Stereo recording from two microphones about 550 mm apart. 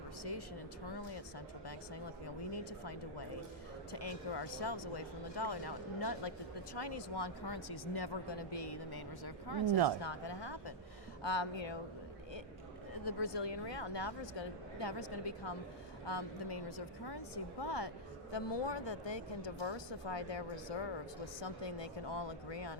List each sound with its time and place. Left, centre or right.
3.9 s speech: left
13.1 s speech: left